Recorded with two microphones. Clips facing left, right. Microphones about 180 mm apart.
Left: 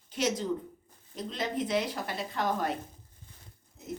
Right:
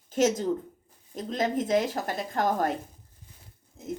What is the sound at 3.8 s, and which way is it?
Pig, 45° right (ahead or behind).